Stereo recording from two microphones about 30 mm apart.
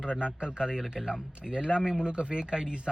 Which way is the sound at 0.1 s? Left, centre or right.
Right.